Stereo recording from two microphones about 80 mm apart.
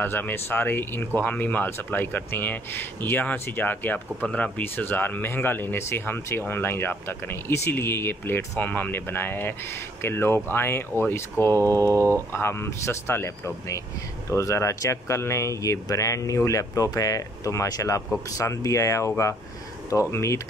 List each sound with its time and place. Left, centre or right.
0.0 s speech: left
11.9 s speech: right
12.3 s speech: left